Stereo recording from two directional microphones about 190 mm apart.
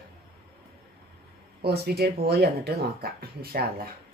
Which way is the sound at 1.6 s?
55° right (ahead or behind).